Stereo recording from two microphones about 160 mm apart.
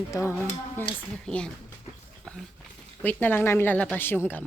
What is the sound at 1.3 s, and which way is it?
Speech, 5° left (ahead or behind).